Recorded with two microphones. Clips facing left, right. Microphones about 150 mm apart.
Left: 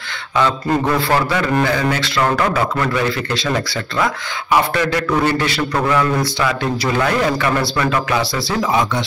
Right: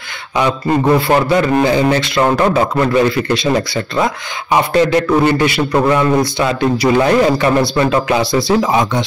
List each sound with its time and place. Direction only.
0.4 s a man's voice: 15° right (ahead or behind)